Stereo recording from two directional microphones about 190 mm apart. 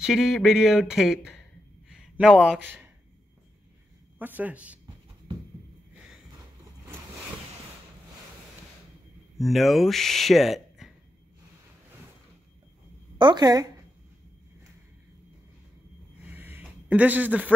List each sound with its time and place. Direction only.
0.0 s speech: centre (ahead or behind)
1.9 s a sound: 5° right (ahead or behind)
4.2 s speech: 10° right (ahead or behind)
9.4 s speech: centre (ahead or behind)
13.2 s speech: 20° right (ahead or behind)
16.3 s a sound: 10° right (ahead or behind)